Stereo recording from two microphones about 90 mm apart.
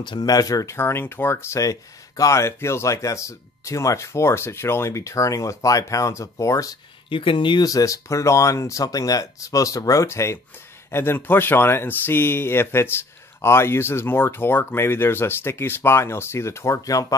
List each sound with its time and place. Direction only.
0.0 s speech: 50° left (ahead or behind)
0.7 s speech: 25° left (ahead or behind)
7.1 s speech: 75° left (ahead or behind)
7.6 s speech: 40° left (ahead or behind)